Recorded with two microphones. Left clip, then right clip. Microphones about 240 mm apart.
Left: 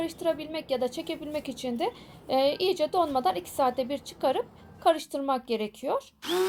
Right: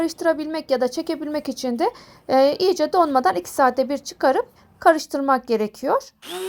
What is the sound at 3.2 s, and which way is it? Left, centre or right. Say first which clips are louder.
A woman's voice: right 8 dB; right.